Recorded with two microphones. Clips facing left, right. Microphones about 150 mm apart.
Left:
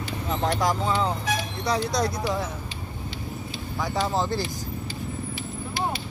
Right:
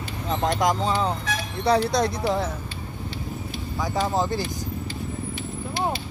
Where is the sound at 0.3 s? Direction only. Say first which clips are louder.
Right 2 dB; 20° right (ahead or behind).